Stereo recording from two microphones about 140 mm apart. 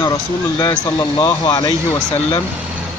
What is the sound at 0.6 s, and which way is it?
Speech, 25° left (ahead or behind).